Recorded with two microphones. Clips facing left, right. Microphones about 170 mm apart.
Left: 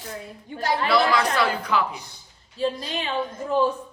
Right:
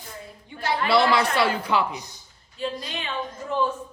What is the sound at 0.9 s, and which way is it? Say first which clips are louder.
Speech: right 2 dB; 25° right (ahead or behind).